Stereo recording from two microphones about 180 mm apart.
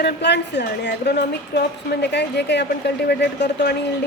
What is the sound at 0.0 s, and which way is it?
A woman's voice, 70° left (ahead or behind).